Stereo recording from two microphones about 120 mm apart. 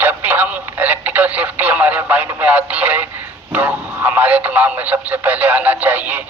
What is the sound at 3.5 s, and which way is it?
Speech, 15° right (ahead or behind).